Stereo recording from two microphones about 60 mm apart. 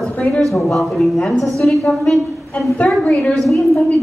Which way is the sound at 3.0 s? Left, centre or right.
Left.